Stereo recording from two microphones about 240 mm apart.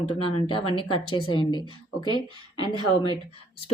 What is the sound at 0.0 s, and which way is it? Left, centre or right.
Speech, left.